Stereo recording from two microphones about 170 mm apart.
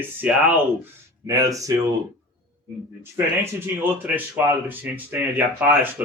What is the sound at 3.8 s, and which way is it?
Speech, 10° right (ahead or behind).